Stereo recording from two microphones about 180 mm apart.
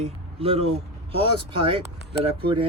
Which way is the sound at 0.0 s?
35° right (ahead or behind).